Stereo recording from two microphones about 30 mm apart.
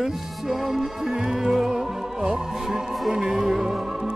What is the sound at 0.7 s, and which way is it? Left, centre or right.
Speech, centre.